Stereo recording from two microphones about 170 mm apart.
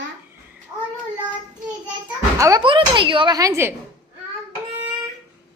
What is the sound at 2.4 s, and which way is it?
Speech, 25° right (ahead or behind).